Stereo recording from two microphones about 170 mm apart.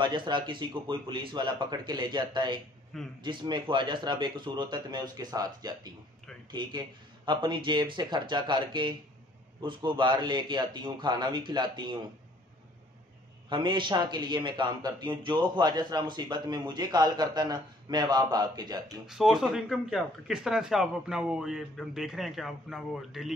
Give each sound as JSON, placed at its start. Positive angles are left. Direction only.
{"t": 0.0, "sound": "a man's voice", "side_deg": -30}
{"t": 2.9, "sound": "speech", "side_deg": 0}
{"t": 3.3, "sound": "a man's voice", "side_deg": -25}
{"t": 13.5, "sound": "a man's voice", "side_deg": -25}
{"t": 19.0, "sound": "speech", "side_deg": -5}